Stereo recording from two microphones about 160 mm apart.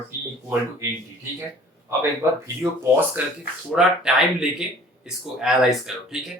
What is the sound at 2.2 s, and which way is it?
Speech, 15° right (ahead or behind).